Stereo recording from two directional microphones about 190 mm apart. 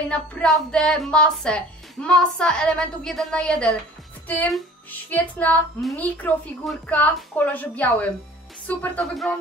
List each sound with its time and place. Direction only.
0.1 s a woman's voice: 5° left (ahead or behind)